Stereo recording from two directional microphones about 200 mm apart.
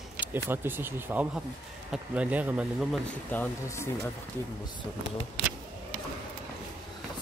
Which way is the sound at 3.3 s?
10° left (ahead or behind).